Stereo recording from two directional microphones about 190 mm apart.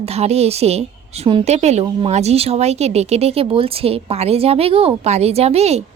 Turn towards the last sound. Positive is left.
turn(degrees=-35)  # may be behind; listen again after turning